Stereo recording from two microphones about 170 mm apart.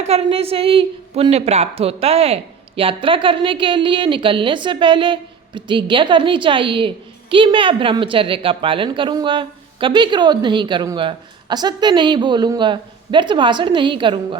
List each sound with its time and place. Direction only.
0.0 s a woman's voice: 40° right (ahead or behind)